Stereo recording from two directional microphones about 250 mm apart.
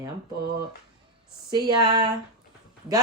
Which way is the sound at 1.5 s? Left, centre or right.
Centre.